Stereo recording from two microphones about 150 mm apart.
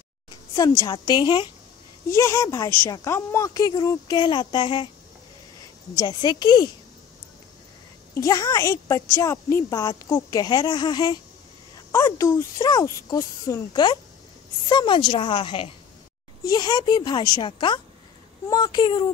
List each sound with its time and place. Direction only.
0.7 s a woman's voice: 30° left (ahead or behind)
2.1 s a woman's voice: 20° left (ahead or behind)
5.9 s a woman's voice: 25° left (ahead or behind)
8.1 s a woman's voice: 20° left (ahead or behind)